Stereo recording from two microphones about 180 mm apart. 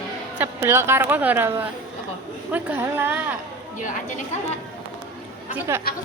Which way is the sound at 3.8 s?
45° left (ahead or behind).